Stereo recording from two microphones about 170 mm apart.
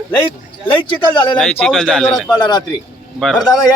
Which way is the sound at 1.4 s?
5° left (ahead or behind).